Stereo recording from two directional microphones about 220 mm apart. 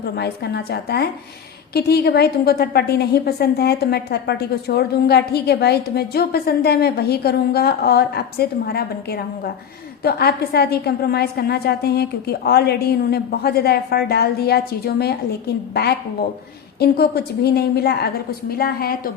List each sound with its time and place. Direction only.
0.0 s a woman's voice: 45° left (ahead or behind)
16.8 s a woman's voice: 45° left (ahead or behind)